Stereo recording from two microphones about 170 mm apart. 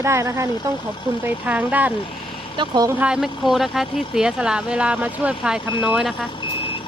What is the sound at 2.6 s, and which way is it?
Speech, 25° right (ahead or behind).